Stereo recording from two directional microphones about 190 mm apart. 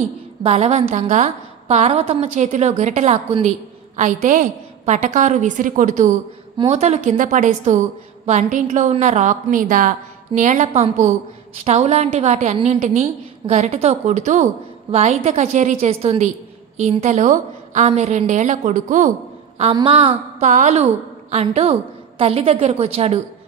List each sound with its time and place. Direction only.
0.4 s a woman's voice: 35° right (ahead or behind)
19.6 s a woman's voice: 25° right (ahead or behind)
20.4 s a woman's voice: 40° right (ahead or behind)